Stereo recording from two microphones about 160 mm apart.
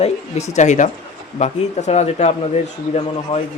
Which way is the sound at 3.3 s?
40° left (ahead or behind).